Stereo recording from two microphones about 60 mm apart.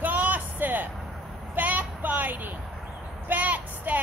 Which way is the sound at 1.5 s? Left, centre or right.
Right.